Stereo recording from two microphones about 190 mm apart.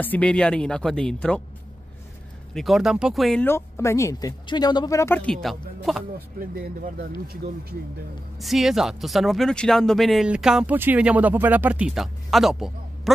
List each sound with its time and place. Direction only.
0.0 s speech: 5° left (ahead or behind)
2.5 s speech: centre (ahead or behind)
6.1 s speech: 50° right (ahead or behind)
8.4 s speech: centre (ahead or behind)